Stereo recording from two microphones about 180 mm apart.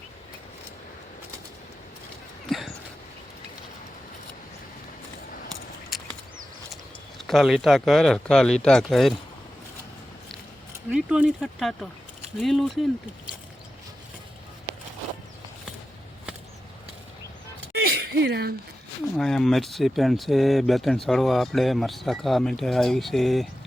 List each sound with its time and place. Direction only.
2.5 s dog: centre (ahead or behind)
5.9 s a sound: centre (ahead or behind)
7.3 s speech: centre (ahead or behind)
10.9 s speech: 5° right (ahead or behind)
17.7 s a sound: 60° right (ahead or behind)
19.1 s speech: centre (ahead or behind)